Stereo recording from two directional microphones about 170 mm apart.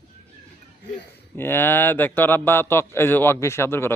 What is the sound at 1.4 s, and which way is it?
A man's voice, 10° left (ahead or behind).